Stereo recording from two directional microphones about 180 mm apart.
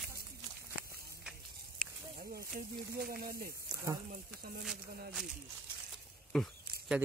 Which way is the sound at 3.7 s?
20° right (ahead or behind).